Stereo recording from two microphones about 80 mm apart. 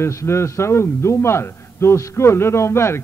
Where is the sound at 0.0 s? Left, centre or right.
Left.